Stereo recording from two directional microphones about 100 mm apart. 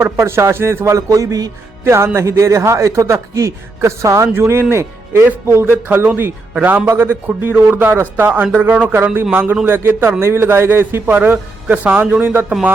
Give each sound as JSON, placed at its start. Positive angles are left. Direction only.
{"t": 0.0, "sound": "a man's voice", "side_deg": -25}